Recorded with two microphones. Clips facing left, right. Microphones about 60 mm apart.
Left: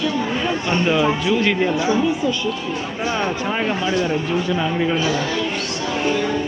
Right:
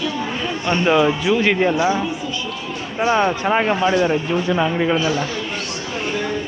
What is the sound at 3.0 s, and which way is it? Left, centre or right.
Speech, right.